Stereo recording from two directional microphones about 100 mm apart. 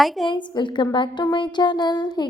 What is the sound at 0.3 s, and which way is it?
A woman's voice, 50° left (ahead or behind).